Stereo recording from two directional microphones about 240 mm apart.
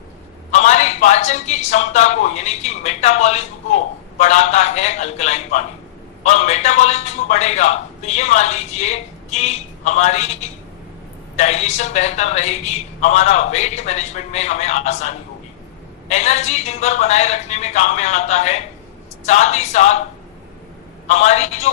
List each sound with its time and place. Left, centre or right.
0.5 s a man's voice: left
11.3 s a man's voice: left
21.1 s a man's voice: left